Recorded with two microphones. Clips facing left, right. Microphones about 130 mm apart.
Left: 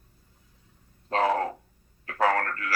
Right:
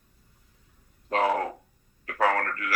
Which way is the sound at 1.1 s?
30° left (ahead or behind).